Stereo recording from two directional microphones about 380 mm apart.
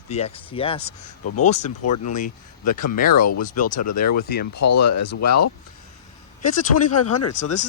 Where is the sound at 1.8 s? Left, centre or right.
Left.